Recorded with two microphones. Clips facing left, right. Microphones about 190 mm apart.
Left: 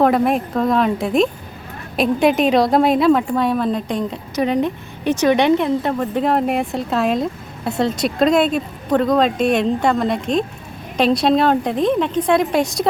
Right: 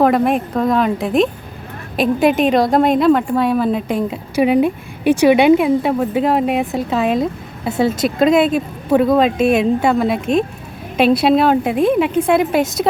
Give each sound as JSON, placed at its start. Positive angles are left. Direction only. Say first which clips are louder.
{"t": 0.0, "sound": "a woman's voice", "louder": "right 1 dB", "side_deg": 0}